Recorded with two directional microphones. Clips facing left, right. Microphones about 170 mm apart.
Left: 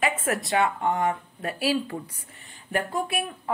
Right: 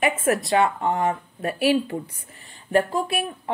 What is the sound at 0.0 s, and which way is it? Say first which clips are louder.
Speech: right 5 dB; 30° right (ahead or behind).